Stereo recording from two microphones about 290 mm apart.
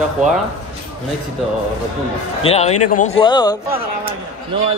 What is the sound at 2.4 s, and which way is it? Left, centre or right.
Speech, left.